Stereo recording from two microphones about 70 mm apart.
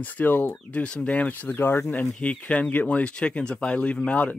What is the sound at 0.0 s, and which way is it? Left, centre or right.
Speech, left.